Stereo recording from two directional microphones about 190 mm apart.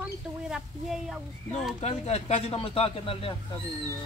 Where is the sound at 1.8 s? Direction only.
35° left (ahead or behind).